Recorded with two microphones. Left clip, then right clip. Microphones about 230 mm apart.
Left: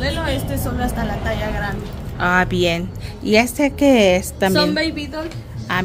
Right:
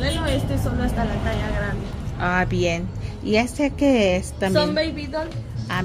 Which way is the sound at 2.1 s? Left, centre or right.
Centre.